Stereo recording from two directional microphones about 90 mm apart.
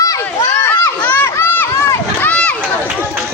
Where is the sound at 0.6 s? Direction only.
25° left (ahead or behind).